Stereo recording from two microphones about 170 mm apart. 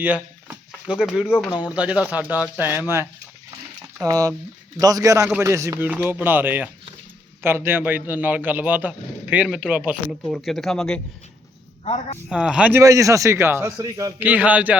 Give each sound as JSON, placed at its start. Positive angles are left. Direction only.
{"t": 0.0, "sound": "speech", "side_deg": -10}
{"t": 1.5, "sound": "speech", "side_deg": 25}
{"t": 1.7, "sound": "a man's voice", "side_deg": -10}
{"t": 12.3, "sound": "speech", "side_deg": -5}
{"t": 12.8, "sound": "a man's voice", "side_deg": -20}
{"t": 14.3, "sound": "speech", "side_deg": -10}